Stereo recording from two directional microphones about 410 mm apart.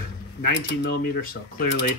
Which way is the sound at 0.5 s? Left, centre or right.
Left.